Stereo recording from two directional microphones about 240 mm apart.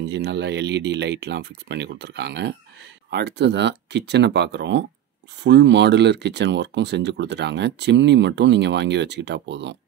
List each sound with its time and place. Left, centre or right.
0.0 s speech: right